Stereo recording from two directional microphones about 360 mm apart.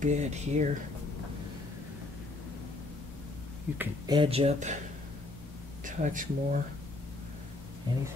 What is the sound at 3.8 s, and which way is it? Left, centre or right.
Speech, centre.